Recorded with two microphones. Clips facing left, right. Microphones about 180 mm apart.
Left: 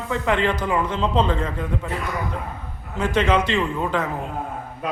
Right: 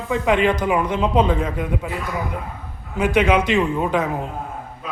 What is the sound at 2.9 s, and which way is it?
A man's voice, 10° right (ahead or behind).